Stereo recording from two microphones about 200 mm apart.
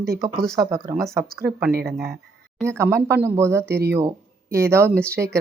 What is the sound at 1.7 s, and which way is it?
Speech, 50° right (ahead or behind).